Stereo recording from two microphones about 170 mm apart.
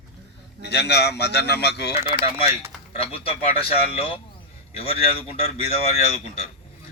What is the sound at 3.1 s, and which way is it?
Speech, 35° left (ahead or behind).